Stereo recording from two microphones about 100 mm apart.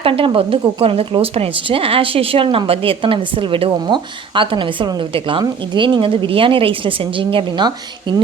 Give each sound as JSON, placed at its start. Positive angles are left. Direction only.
{"t": 0.0, "sound": "a woman's voice", "side_deg": -65}